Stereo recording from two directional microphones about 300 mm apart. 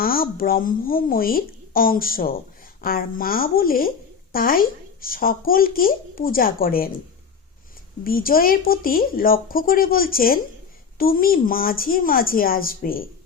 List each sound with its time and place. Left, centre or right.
0.0 s a woman's voice: left
8.0 s a woman's voice: left